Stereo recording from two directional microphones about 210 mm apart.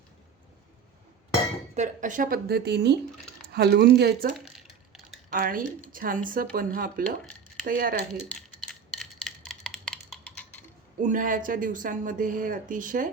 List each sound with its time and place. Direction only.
1.7 s speech: 35° right (ahead or behind)
4.4 s a sound: centre (ahead or behind)
5.3 s speech: 40° right (ahead or behind)
7.0 s speech: 5° left (ahead or behind)
7.6 s speech: 45° right (ahead or behind)
8.3 s a sound: centre (ahead or behind)
11.0 s speech: 40° right (ahead or behind)